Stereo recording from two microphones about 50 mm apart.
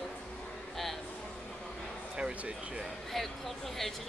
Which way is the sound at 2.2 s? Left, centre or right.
Right.